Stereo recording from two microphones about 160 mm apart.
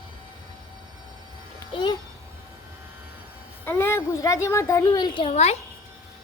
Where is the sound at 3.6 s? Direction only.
15° left (ahead or behind); by 5.6 s 40° left (ahead or behind).